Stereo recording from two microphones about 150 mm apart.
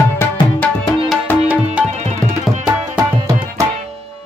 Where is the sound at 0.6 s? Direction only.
10° left (ahead or behind).